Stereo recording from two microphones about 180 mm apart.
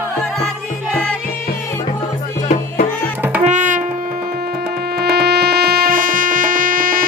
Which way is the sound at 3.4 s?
45° right (ahead or behind).